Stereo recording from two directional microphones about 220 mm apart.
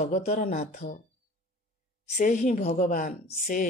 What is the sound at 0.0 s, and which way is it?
Speech, 35° left (ahead or behind).